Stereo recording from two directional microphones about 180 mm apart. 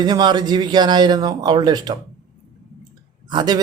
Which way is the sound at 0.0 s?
25° right (ahead or behind).